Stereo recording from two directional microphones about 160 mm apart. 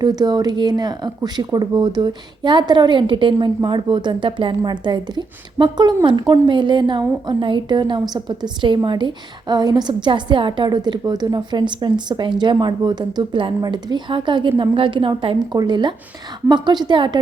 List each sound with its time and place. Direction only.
0.0 s a woman's voice: 25° right (ahead or behind)